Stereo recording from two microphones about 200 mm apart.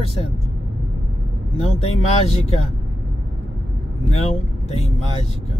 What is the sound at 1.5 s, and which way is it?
Speech, 30° left (ahead or behind).